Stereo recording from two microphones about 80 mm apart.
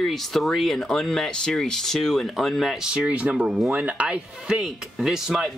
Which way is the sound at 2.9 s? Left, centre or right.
Centre.